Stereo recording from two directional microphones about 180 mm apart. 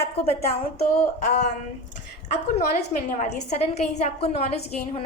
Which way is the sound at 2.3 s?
45° left (ahead or behind).